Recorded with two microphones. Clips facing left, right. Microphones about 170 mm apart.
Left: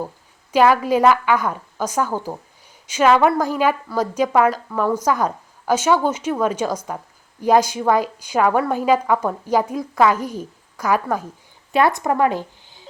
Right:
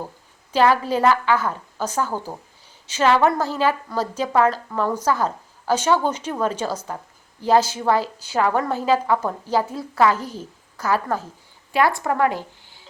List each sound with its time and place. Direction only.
0.5 s a woman's voice: 10° left (ahead or behind)